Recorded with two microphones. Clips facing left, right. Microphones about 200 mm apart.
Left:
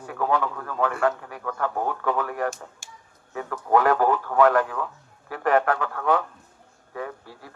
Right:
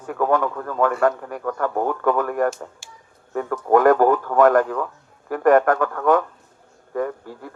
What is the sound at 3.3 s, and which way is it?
A man's voice, 45° right (ahead or behind).